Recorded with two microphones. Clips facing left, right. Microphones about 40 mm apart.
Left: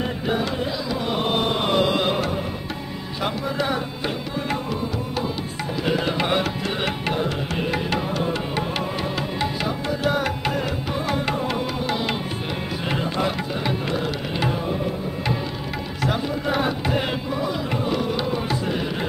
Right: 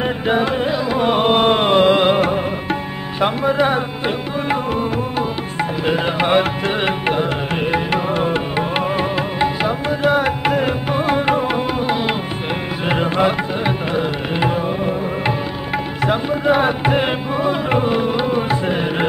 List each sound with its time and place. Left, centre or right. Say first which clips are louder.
0.0 s music: right 6 dB; right
3.2 s speech: right 9 dB; right
5.6 s music: right 5 dB; right
16.0 s music: right 5 dB; right